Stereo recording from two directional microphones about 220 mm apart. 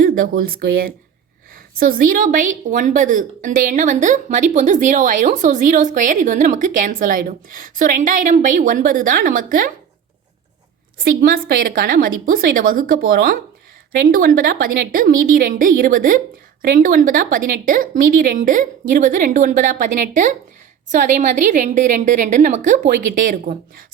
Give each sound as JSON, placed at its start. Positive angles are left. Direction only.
{"t": 0.0, "sound": "a woman's voice", "side_deg": -40}
{"t": 11.0, "sound": "a woman's voice", "side_deg": -40}